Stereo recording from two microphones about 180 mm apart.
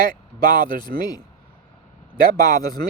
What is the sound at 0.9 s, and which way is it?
Speech, 60° right (ahead or behind).